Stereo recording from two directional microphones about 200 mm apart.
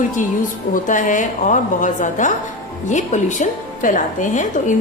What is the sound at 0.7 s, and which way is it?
A woman's voice, 40° left (ahead or behind).